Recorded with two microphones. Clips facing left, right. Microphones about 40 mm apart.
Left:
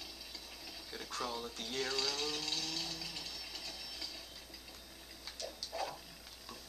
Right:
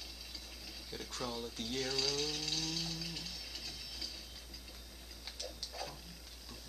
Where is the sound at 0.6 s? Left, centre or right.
Centre.